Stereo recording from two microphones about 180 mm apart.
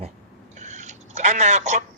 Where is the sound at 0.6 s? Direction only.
40° right (ahead or behind).